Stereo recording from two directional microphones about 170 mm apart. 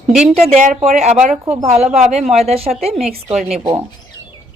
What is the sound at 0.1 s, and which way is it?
Speech, centre (ahead or behind).